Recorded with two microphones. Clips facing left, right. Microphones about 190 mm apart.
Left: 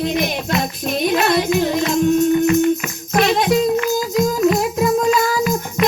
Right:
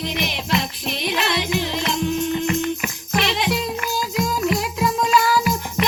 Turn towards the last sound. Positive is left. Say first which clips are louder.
# left 2 dB
turn(degrees=45)  # may be behind; listen again after turning